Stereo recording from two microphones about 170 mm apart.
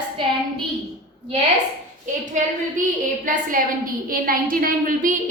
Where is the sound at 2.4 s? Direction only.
50° right (ahead or behind).